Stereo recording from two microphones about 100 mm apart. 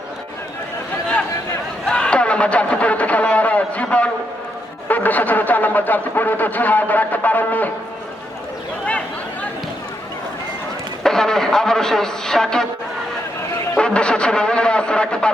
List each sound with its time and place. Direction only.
1.9 s a sound: 10° left (ahead or behind)
4.9 s speech: 15° left (ahead or behind)
11.0 s a man's voice: 5° left (ahead or behind)
13.7 s speech: 10° left (ahead or behind)